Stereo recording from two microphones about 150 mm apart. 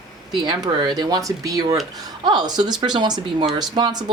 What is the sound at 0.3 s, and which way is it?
Speech, 30° right (ahead or behind).